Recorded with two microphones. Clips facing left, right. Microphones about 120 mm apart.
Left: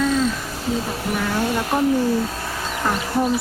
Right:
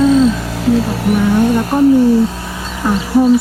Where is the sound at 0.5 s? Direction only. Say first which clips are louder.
Right 10 dB; 70° right (ahead or behind).